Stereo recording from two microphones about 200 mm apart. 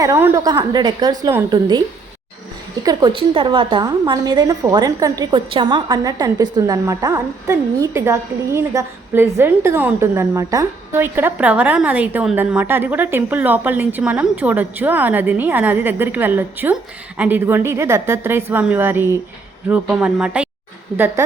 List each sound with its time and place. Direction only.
0.0 s a woman's voice: 15° right (ahead or behind)
2.8 s a woman's voice: 20° right (ahead or behind)